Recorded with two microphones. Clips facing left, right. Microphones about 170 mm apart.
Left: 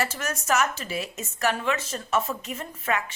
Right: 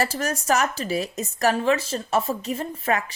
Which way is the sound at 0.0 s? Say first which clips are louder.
Right 4 dB; 35° right (ahead or behind).